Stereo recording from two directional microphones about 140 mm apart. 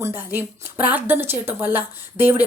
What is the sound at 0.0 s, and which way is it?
Speech, 15° right (ahead or behind).